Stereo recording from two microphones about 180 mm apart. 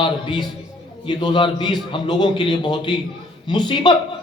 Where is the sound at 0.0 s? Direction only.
25° left (ahead or behind).